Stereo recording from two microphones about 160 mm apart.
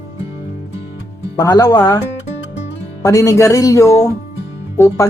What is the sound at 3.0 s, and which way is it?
Speech, 20° left (ahead or behind).